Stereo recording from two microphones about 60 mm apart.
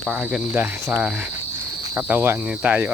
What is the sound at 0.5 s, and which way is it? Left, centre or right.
Speech, right.